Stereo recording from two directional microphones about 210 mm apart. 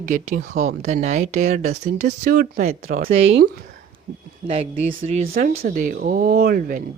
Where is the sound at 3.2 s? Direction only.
60° right (ahead or behind).